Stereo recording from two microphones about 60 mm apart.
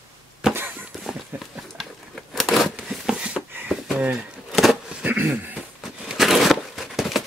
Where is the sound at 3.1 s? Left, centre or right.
Centre.